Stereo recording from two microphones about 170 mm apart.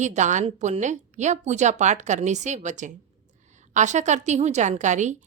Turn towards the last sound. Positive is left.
turn(degrees=-45)  # may be behind; listen again after turning